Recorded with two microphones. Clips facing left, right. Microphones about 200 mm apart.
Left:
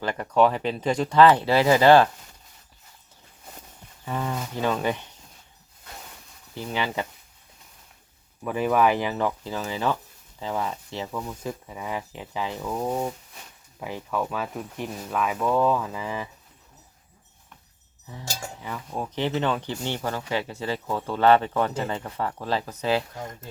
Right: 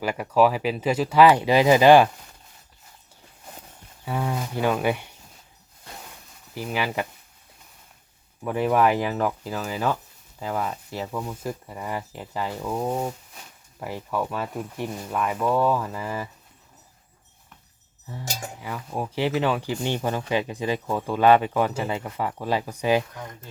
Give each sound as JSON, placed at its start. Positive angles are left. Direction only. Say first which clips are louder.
{"t": 0.0, "sound": "speech", "louder": "right 1 dB", "side_deg": -10}
{"t": 4.0, "sound": "speech", "louder": "right 2 dB", "side_deg": -10}
{"t": 6.5, "sound": "speech", "louder": "right 1 dB", "side_deg": -5}
{"t": 8.4, "sound": "speech", "louder": "right 1 dB", "side_deg": 0}
{"t": 18.3, "sound": "speech", "louder": "right 1 dB", "side_deg": -15}
{"t": 23.1, "sound": "speech", "louder": "left 2 dB", "side_deg": 20}